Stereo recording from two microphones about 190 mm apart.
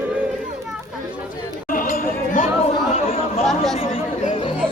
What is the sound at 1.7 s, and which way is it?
Chatter, 45° left (ahead or behind).